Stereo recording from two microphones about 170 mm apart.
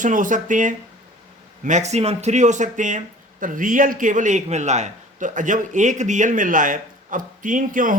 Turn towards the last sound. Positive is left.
turn(degrees=-50)  # may be behind; listen again after turning